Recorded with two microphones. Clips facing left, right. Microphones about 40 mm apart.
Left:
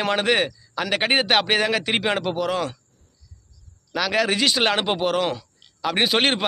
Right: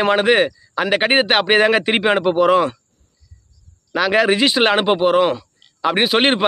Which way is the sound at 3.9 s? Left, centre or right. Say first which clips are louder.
Right 6 dB; right.